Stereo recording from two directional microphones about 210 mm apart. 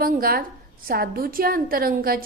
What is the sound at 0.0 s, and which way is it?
A woman's voice, 45° right (ahead or behind).